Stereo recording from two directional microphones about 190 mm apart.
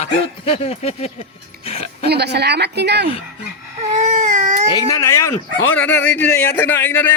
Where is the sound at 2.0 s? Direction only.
60° right (ahead or behind).